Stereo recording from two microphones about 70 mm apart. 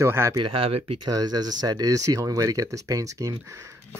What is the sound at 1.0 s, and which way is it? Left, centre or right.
Speech, right.